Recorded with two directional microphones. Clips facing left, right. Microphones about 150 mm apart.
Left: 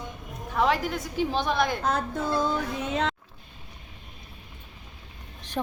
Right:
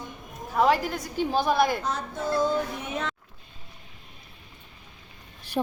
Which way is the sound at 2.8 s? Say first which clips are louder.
Left 4 dB; 85° left.